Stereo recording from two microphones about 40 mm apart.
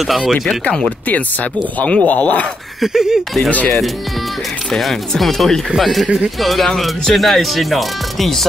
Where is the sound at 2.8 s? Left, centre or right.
Centre.